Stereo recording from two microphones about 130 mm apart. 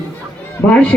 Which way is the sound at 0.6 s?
10° left (ahead or behind).